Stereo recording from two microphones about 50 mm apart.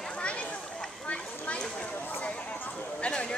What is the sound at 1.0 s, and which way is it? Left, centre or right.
Clip-clop, left.